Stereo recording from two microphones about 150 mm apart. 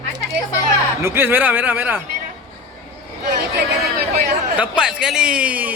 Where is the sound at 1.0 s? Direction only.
15° right (ahead or behind).